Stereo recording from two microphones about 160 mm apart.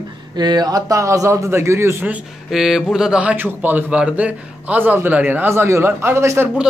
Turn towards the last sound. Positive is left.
turn(degrees=-15)  # may be behind; listen again after turning